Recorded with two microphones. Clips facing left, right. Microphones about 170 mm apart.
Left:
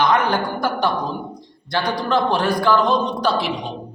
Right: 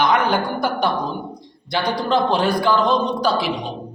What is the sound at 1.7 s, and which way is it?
Speech, 20° right (ahead or behind).